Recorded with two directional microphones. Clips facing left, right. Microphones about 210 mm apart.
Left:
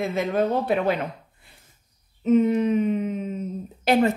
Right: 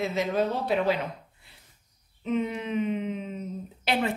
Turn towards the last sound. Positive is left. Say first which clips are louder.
# left 8 dB
turn(degrees=40)  # may be behind; listen again after turning